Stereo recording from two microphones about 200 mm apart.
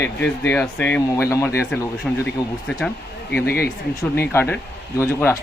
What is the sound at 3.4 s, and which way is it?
Speech, 50° left (ahead or behind).